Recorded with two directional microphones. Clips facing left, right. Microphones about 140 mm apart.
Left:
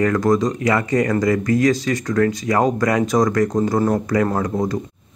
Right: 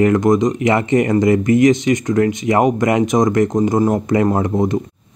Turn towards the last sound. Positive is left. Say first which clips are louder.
# right 4 dB
turn(degrees=-20)  # may be behind; listen again after turning